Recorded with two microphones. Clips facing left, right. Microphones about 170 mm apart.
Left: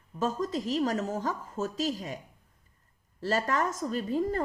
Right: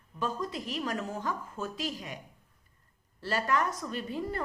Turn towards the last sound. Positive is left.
turn(degrees=40)  # may be behind; listen again after turning